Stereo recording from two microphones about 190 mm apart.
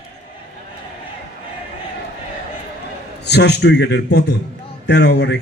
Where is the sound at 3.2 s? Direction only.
65° left (ahead or behind).